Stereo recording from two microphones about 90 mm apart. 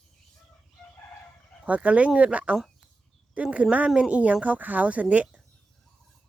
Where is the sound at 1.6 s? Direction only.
15° right (ahead or behind).